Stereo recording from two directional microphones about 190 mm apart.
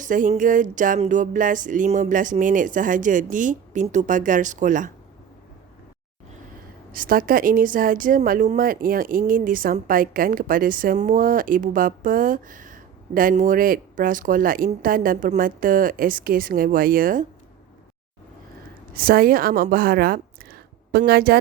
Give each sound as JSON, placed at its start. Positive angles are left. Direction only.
{"t": 0.0, "sound": "speech", "side_deg": -45}
{"t": 6.9, "sound": "speech", "side_deg": -50}
{"t": 18.9, "sound": "a woman's voice", "side_deg": -50}